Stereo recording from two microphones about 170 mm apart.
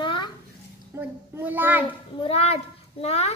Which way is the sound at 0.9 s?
15° right (ahead or behind).